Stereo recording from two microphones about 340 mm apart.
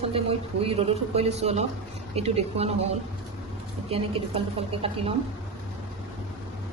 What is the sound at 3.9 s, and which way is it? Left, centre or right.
A woman's voice, centre.